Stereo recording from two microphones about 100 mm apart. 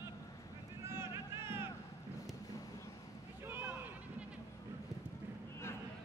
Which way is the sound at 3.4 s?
20° right (ahead or behind).